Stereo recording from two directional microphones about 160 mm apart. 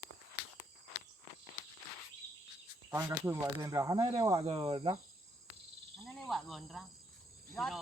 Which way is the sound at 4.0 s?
35° right (ahead or behind).